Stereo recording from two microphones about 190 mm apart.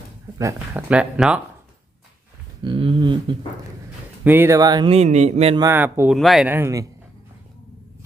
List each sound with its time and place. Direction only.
0.3 s speech: 15° right (ahead or behind)
2.6 s speech: 25° right (ahead or behind)
4.2 s speech: 10° right (ahead or behind)
4.9 s speech: 35° right (ahead or behind)
5.5 s speech: 15° right (ahead or behind)